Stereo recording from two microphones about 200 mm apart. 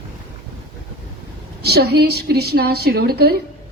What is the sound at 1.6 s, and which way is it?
A woman's voice, 55° right (ahead or behind).